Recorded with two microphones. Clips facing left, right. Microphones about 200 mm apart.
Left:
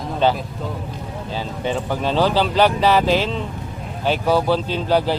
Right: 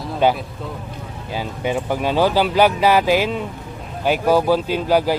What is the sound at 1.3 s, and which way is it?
Speech, 10° right (ahead or behind).